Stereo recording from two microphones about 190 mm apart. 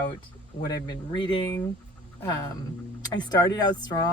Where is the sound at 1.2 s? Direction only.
20° left (ahead or behind).